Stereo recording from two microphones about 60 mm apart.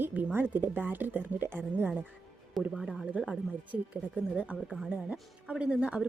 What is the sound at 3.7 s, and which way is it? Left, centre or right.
Speech, right.